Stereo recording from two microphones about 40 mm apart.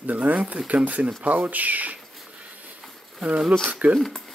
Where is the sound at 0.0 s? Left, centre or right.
Right.